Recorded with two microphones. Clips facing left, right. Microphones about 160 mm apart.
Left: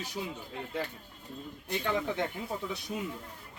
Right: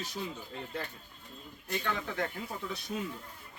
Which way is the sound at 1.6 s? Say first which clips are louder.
Left 4 dB; 20° left (ahead or behind).